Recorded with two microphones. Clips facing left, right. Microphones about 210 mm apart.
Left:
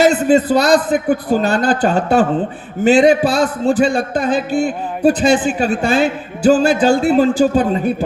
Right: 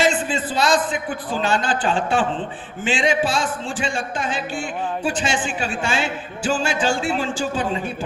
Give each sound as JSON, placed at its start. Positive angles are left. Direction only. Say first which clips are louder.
{"t": 0.0, "sound": "a man's voice", "louder": "left 9 dB", "side_deg": 40}